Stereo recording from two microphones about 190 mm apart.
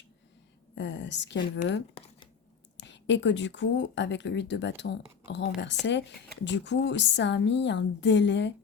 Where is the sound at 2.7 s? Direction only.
70° left (ahead or behind).